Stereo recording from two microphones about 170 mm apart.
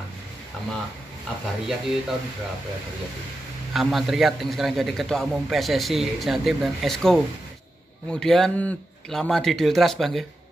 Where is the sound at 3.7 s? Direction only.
Centre (ahead or behind).